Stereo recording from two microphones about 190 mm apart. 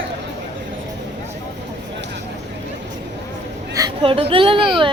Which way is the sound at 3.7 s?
25° right (ahead or behind).